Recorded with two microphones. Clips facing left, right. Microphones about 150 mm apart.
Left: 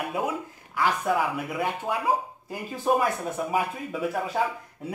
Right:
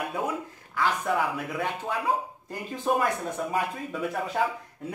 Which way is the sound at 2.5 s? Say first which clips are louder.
Left 2 dB; 5° left (ahead or behind).